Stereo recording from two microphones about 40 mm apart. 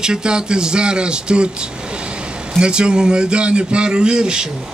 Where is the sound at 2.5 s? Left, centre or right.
Right.